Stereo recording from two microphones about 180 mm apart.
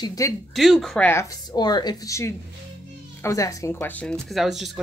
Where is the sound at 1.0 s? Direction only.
15° left (ahead or behind); by 4.7 s centre (ahead or behind).